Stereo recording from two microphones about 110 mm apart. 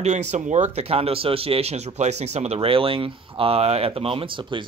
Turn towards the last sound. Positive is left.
turn(degrees=-50)  # may be behind; listen again after turning